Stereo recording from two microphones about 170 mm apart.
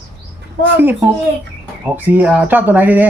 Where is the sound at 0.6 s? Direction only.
10° right (ahead or behind).